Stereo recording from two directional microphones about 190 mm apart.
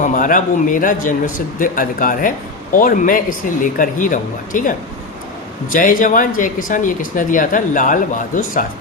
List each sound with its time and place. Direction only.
0.0 s speech: 45° left (ahead or behind)
5.7 s speech: 45° left (ahead or behind)